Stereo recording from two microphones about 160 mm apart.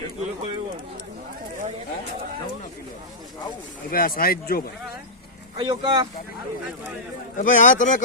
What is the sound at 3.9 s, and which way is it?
Speech, 65° left (ahead or behind).